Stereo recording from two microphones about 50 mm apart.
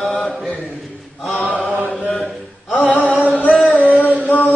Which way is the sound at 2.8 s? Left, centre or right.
Centre.